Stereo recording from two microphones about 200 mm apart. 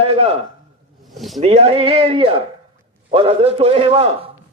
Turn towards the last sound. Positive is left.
turn(degrees=-30)  # may be behind; listen again after turning